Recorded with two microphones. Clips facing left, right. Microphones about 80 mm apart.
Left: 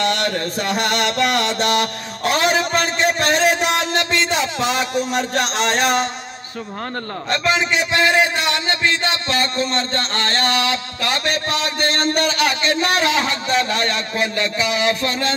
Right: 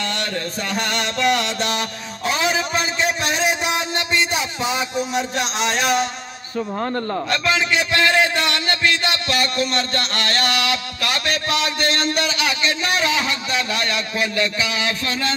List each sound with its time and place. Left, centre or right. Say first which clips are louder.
0.0 s mantra: left 5 dB; left
4.6 s speech: left 3 dB; left
7.2 s a man's voice: left 4 dB; left